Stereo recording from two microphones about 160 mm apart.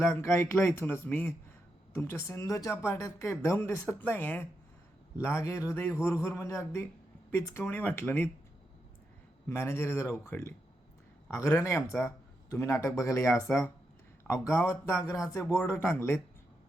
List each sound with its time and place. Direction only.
0.0 s speech: 15° left (ahead or behind)
9.5 s speech: 15° left (ahead or behind)